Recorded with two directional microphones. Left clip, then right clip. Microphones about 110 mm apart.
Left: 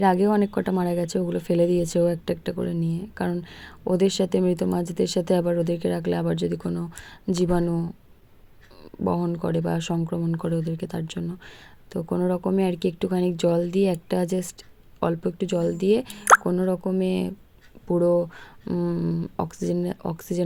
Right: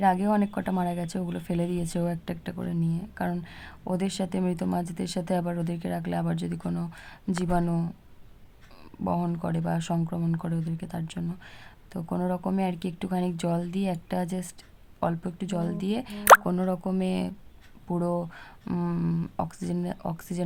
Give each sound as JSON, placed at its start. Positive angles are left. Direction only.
{"t": 0.0, "sound": "speech", "side_deg": 35}
{"t": 6.7, "sound": "a sound", "side_deg": 15}
{"t": 7.6, "sound": "speech", "side_deg": 5}
{"t": 9.4, "sound": "speech", "side_deg": 25}
{"t": 16.4, "sound": "speech", "side_deg": 5}
{"t": 16.6, "sound": "a sound", "side_deg": 10}
{"t": 17.0, "sound": "speech", "side_deg": 25}
{"t": 18.6, "sound": "a sound", "side_deg": 10}
{"t": 19.4, "sound": "speech", "side_deg": 25}